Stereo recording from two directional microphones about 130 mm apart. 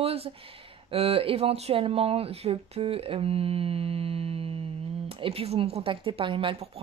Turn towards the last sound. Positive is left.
turn(degrees=-40)  # may be behind; listen again after turning